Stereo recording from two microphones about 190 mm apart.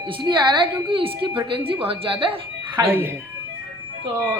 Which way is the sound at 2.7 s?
10° right (ahead or behind).